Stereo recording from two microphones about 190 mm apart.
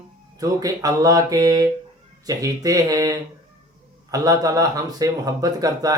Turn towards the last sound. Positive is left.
turn(degrees=-20)  # may be behind; listen again after turning